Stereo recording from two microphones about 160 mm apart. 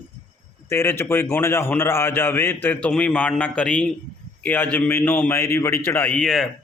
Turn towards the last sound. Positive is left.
turn(degrees=5)  # may be behind; listen again after turning